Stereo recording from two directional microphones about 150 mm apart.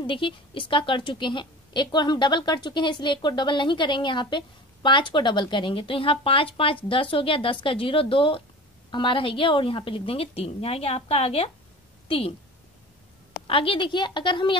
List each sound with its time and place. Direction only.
0.0 s a woman's voice: 35° left (ahead or behind)
13.5 s a woman's voice: 35° left (ahead or behind)